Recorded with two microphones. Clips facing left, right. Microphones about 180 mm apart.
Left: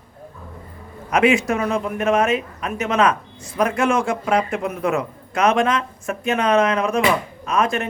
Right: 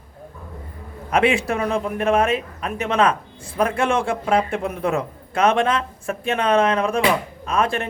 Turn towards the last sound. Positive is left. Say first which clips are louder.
# left 1 dB
turn(degrees=-30)  # may be behind; listen again after turning